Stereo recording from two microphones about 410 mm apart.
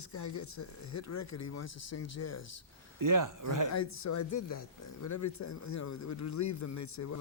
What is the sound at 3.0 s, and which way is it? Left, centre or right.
Speech, right.